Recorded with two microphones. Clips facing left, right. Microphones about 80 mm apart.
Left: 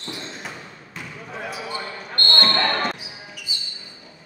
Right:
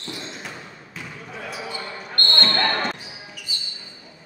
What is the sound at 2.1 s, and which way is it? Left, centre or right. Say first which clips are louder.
Basketball bounce: left 1 dB; centre.